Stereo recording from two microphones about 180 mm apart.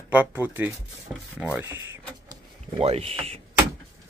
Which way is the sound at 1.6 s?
15° right (ahead or behind).